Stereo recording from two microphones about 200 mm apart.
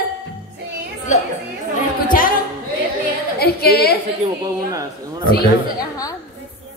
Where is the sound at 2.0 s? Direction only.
45° left (ahead or behind).